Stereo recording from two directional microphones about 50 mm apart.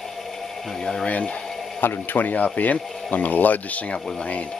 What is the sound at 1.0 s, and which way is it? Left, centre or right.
Speech, left.